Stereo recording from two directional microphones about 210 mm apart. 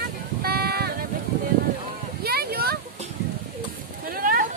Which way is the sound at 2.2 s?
45° right (ahead or behind).